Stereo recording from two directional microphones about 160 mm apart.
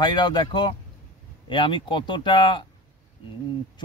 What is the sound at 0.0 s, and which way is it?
Speech, 25° left (ahead or behind).